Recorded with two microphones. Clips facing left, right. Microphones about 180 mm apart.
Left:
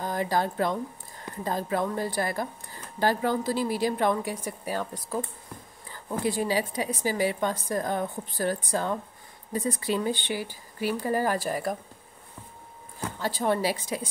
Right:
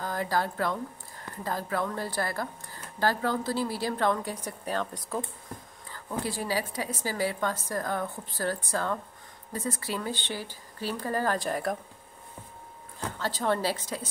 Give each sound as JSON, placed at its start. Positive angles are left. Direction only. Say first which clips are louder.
{"t": 0.0, "sound": "a woman's voice", "louder": "left 2 dB", "side_deg": 20}
{"t": 5.9, "sound": "a woman's voice", "louder": "left 4 dB", "side_deg": 15}
{"t": 13.2, "sound": "a woman's voice", "louder": "left 2 dB", "side_deg": 15}